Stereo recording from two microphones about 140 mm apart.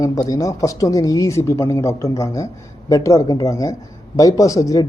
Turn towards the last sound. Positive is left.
turn(degrees=25)  # may be behind; listen again after turning